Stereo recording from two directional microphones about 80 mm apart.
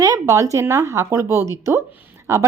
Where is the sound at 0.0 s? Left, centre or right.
Right.